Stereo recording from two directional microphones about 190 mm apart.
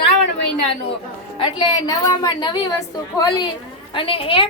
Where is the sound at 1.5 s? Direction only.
25° left (ahead or behind).